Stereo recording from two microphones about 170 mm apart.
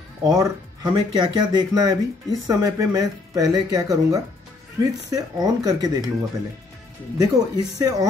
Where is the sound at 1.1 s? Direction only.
25° right (ahead or behind).